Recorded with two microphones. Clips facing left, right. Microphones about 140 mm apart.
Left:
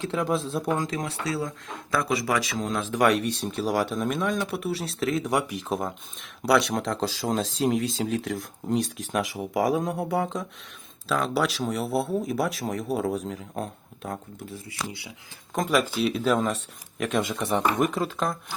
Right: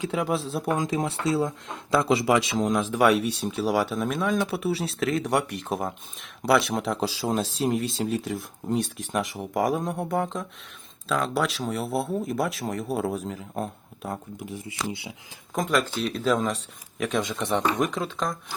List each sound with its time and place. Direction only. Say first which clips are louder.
0.0 s speech: even; 5° right (ahead or behind)
0.9 s speech: right 4 dB; 25° right (ahead or behind); by 14.2 s 5° right (ahead or behind)
14.4 s speech: right 5 dB; 15° right (ahead or behind)
15.5 s speech: left 1 dB; centre (ahead or behind)